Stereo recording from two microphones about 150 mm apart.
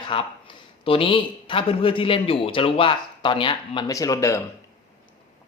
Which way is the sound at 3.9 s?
20° left (ahead or behind).